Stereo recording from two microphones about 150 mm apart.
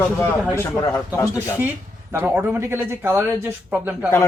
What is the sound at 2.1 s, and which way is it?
Speech, 15° right (ahead or behind).